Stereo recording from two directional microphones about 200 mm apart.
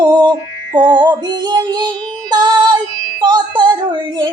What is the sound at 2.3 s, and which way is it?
Child singing, 20° right (ahead or behind).